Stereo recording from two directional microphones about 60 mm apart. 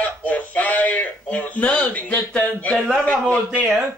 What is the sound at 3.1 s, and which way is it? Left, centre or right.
Speech, left.